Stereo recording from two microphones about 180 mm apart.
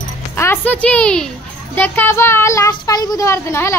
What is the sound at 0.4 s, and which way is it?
A woman's voice, 10° left (ahead or behind).